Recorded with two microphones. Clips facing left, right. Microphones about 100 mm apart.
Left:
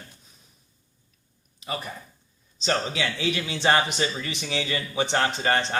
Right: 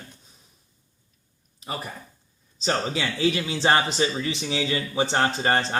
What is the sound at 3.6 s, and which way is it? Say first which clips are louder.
Speech: right 1 dB; 25° right (ahead or behind).